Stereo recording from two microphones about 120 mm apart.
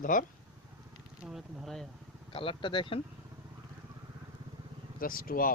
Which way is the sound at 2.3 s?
45° left (ahead or behind).